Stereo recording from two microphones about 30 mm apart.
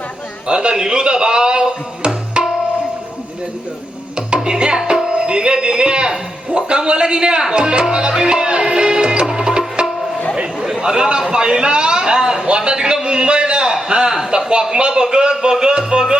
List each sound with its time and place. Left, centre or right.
0.4 s speech: right
4.4 s a man's voice: right
8.2 s music: right
10.8 s speech: right
12.5 s a sound: right
14.3 s speech: right